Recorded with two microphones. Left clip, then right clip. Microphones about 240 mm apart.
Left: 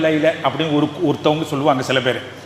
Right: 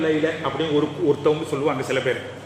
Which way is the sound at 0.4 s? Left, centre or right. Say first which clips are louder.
Left 4 dB; left.